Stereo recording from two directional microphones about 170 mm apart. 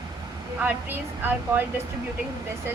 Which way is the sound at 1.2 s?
10° right (ahead or behind).